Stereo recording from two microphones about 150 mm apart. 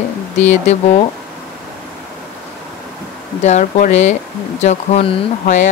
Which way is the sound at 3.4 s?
50° left (ahead or behind).